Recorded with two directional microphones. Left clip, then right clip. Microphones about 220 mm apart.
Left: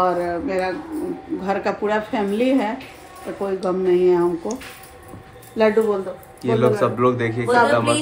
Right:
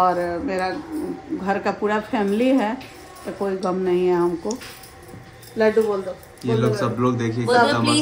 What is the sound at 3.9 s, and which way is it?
Speech, 10° right (ahead or behind).